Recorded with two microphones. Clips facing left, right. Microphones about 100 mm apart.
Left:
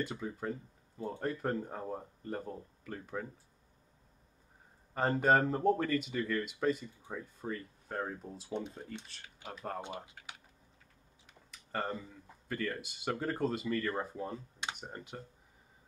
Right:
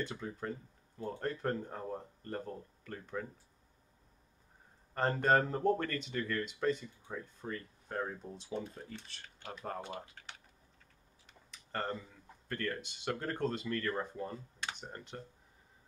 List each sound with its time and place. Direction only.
0.0 s speech: 5° left (ahead or behind)
4.9 s speech: 5° left (ahead or behind)
8.5 s speech: 20° left (ahead or behind)
9.0 s speech: centre (ahead or behind)
11.5 s speech: 5° left (ahead or behind)
14.6 s computer keyboard: 15° left (ahead or behind)
14.9 s speech: 5° left (ahead or behind)